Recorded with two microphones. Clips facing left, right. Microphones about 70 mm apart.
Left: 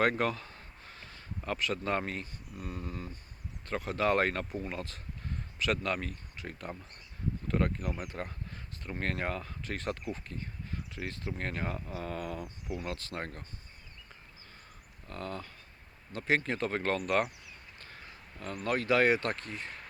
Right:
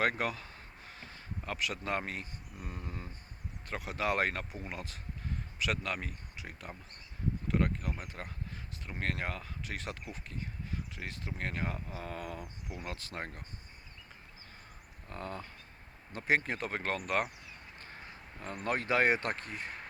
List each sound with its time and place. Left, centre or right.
0.0 s a sound: centre
1.5 s speech: centre
12.7 s speech: centre
15.0 s speech: centre
17.7 s speech: right